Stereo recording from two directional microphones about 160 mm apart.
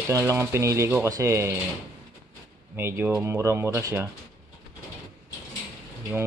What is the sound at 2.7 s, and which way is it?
Speech, 15° right (ahead or behind).